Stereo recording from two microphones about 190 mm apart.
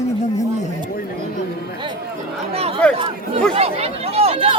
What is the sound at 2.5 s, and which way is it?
Chatter, 30° right (ahead or behind).